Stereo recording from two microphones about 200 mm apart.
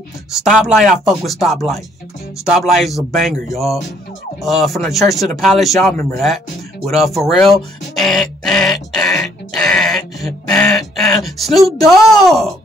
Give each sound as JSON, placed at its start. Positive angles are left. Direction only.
{"t": 0.6, "sound": "speech", "side_deg": 0}
{"t": 9.2, "sound": "a sound", "side_deg": 0}
{"t": 12.3, "sound": "speech", "side_deg": 0}